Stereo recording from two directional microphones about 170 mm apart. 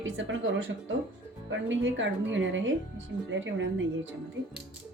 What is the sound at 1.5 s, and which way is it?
A woman's voice, 90° right.